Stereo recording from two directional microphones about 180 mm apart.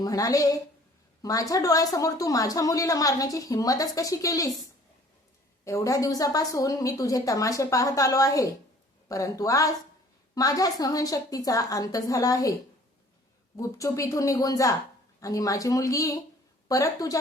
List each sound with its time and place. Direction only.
0.0 s a woman's voice: 20° left (ahead or behind)
5.6 s a woman's voice: 15° left (ahead or behind)
13.6 s a woman's voice: 15° left (ahead or behind)